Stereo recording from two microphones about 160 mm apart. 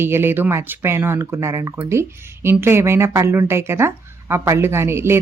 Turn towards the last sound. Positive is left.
turn(degrees=-15)  # may be behind; listen again after turning